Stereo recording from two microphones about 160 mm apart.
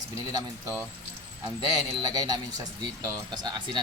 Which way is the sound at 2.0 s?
25° right (ahead or behind).